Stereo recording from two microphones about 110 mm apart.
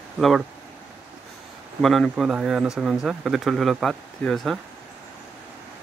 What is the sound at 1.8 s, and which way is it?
Speech, centre (ahead or behind).